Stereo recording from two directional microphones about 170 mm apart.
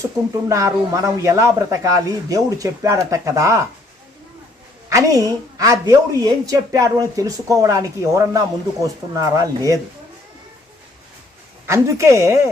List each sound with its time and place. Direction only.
0.4 s a man's voice: 20° right (ahead or behind)
4.9 s a woman's voice: 20° right (ahead or behind)
11.6 s a man's voice: 15° right (ahead or behind)